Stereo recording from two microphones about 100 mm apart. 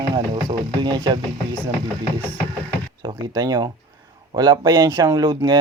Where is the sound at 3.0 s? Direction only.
40° right (ahead or behind).